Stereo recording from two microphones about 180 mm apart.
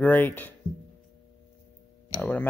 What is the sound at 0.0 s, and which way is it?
Speech, 10° left (ahead or behind).